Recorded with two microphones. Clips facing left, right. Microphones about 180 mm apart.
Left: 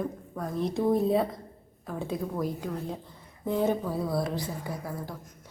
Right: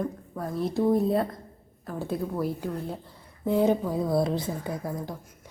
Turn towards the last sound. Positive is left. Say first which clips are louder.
# right 3 dB
turn(degrees=-20)  # may be behind; listen again after turning